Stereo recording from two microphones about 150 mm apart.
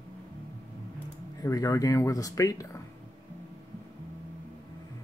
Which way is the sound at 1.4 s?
25° left (ahead or behind).